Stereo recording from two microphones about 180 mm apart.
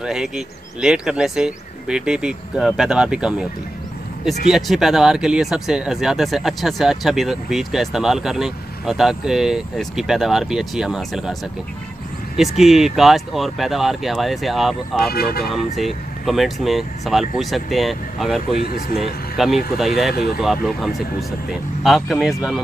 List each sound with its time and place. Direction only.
0.0 s speech: 5° right (ahead or behind)
4.5 s speech: centre (ahead or behind)
12.4 s speech: centre (ahead or behind)
15.0 s speech: 60° left (ahead or behind)
15.5 s speech: centre (ahead or behind)
20.1 s speech: 60° left (ahead or behind)
20.3 s speech: centre (ahead or behind)